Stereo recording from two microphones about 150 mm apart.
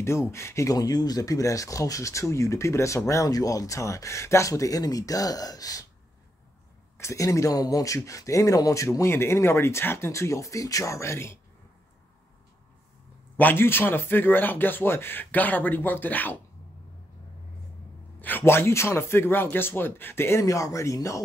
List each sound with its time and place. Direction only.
0.0 s speech: 15° left (ahead or behind)
7.0 s speech: 20° left (ahead or behind)
13.4 s speech: 15° left (ahead or behind)
18.2 s speech: 15° left (ahead or behind)